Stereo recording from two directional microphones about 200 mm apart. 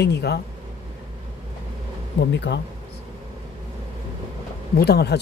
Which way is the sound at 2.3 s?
60° left (ahead or behind).